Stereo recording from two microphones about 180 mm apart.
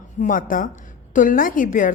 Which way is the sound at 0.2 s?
50° left (ahead or behind).